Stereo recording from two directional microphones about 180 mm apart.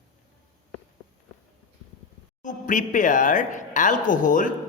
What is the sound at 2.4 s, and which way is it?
A woman's voice, 45° left (ahead or behind).